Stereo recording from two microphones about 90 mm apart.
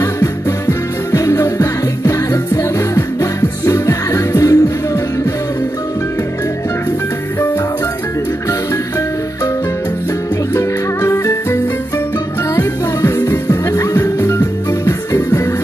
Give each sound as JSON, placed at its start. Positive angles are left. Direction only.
{"t": 0.0, "sound": "music", "side_deg": 35}
{"t": 10.5, "sound": "music", "side_deg": 35}